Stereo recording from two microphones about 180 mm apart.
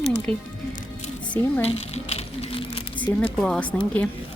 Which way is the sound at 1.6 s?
35° left (ahead or behind).